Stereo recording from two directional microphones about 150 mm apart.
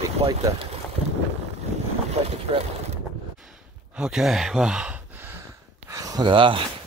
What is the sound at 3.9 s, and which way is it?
Speech, 5° right (ahead or behind).